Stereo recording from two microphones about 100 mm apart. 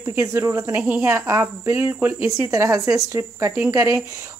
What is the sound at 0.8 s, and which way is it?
Speech, 15° right (ahead or behind).